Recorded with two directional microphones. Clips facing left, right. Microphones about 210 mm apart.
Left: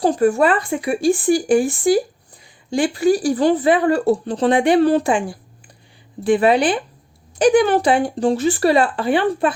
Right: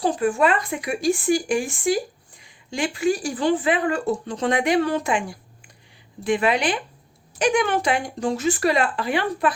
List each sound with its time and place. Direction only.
0.0 s speech: 40° left (ahead or behind)